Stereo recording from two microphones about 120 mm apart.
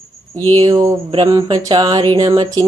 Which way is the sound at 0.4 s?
35° right (ahead or behind).